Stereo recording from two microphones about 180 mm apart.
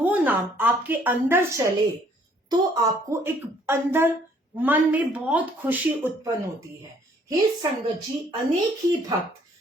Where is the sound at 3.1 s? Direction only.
10° right (ahead or behind).